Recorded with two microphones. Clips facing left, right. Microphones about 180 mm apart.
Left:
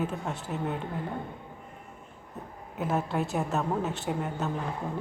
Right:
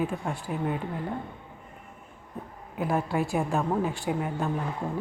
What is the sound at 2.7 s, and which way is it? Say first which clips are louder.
Speech: right 2 dB; centre (ahead or behind).